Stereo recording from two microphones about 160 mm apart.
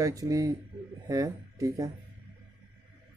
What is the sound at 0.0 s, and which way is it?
Speech, 20° right (ahead or behind).